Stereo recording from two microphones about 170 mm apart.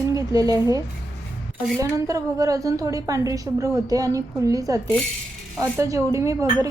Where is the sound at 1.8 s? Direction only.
20° right (ahead or behind).